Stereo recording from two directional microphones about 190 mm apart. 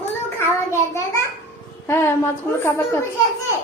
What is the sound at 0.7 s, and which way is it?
A woman's voice, 15° left (ahead or behind).